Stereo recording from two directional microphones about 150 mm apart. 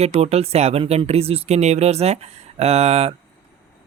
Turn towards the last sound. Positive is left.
turn(degrees=-45)  # may be behind; listen again after turning